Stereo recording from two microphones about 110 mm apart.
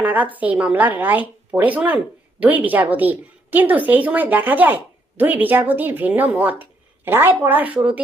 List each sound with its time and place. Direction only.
0.0 s a woman's voice: 15° right (ahead or behind)